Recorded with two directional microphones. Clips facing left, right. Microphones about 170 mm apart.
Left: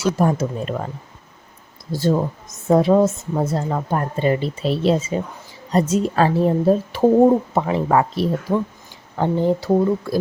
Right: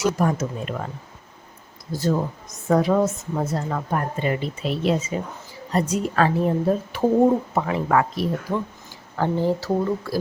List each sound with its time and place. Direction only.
0.0 s a woman's voice: 30° left (ahead or behind)
1.9 s a woman's voice: 30° left (ahead or behind)